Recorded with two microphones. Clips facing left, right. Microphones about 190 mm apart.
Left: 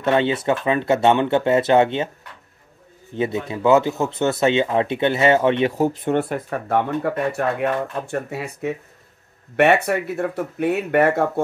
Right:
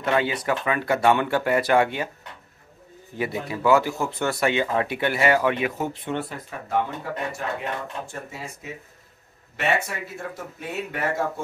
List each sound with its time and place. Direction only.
0.0 s speech: 25° left (ahead or behind)
3.2 s speech: 25° left (ahead or behind); by 11.4 s 60° left (ahead or behind)